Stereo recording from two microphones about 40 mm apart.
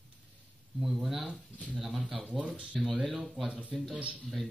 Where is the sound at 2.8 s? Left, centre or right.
Centre.